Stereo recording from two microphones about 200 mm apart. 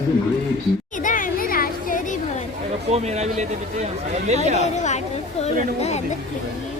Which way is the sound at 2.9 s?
35° right (ahead or behind).